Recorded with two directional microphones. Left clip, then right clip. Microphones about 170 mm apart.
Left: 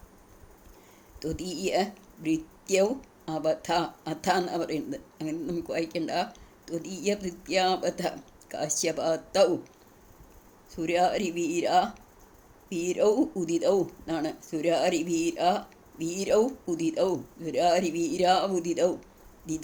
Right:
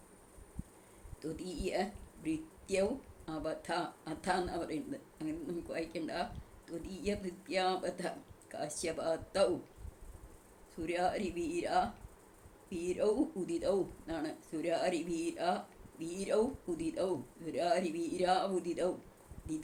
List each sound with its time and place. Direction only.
1.2 s speech: 55° left (ahead or behind)
10.8 s speech: 55° left (ahead or behind)